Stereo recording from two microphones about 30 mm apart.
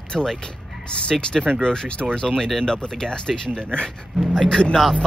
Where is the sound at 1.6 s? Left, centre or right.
Left.